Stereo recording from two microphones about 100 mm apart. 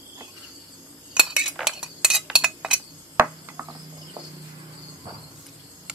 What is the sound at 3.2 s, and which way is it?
Cricket, 20° right (ahead or behind).